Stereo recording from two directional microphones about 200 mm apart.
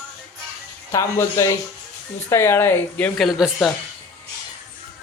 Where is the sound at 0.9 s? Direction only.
15° left (ahead or behind); by 3.7 s centre (ahead or behind).